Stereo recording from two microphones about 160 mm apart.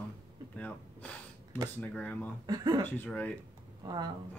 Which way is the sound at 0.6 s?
10° left (ahead or behind).